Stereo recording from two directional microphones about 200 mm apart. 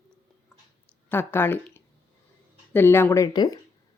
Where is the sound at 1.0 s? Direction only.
10° left (ahead or behind).